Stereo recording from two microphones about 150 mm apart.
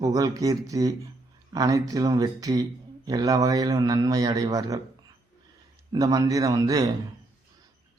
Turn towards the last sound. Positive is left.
turn(degrees=-25)  # may be behind; listen again after turning